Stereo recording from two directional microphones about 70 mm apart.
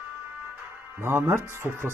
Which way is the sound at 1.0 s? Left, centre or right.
Right.